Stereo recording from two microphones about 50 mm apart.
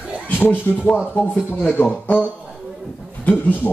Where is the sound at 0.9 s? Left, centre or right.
Left.